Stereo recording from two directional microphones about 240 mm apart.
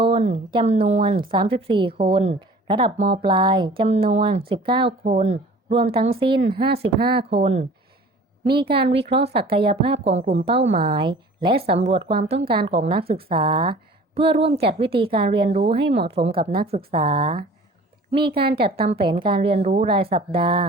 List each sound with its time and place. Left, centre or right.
0.0 s a woman's voice: right
7.0 s speech: right
7.3 s a woman's voice: right
8.7 s speech: right
9.0 s a woman's voice: right